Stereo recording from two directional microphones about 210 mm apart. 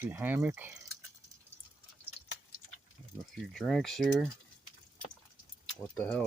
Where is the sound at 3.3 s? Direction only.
Centre (ahead or behind).